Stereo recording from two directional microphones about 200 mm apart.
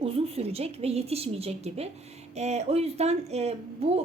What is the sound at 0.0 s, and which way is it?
A woman's voice, 30° right (ahead or behind).